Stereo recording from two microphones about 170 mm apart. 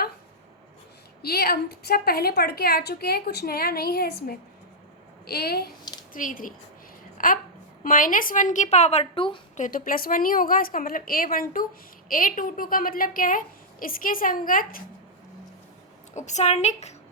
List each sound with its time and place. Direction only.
1.2 s a woman's voice: 65° left (ahead or behind)
6.1 s a woman's voice: 50° left (ahead or behind); by 9.4 s 30° left (ahead or behind)
9.6 s a woman's voice: 50° left (ahead or behind)
16.1 s a woman's voice: 45° left (ahead or behind)